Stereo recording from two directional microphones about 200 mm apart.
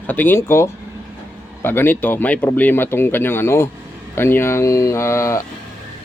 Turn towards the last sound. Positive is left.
turn(degrees=15)  # may be behind; listen again after turning